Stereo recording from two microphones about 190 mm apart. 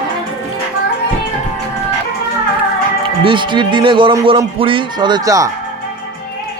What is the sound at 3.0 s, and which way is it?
A man's voice, 25° right (ahead or behind).